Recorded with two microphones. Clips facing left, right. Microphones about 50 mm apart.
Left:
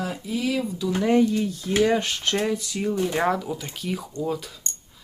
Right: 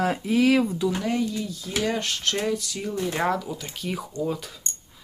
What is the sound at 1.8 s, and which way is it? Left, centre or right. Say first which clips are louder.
Speech: left 5 dB; centre.